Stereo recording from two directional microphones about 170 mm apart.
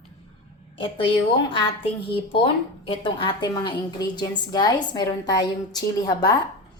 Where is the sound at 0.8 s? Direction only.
30° left (ahead or behind).